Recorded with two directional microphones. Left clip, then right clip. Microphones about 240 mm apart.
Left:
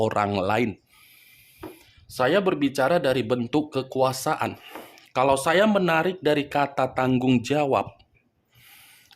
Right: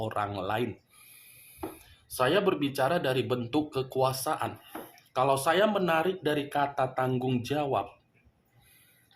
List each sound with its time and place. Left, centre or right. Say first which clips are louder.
0.0 s speech: left 9 dB; left
2.1 s speech: left 4 dB; left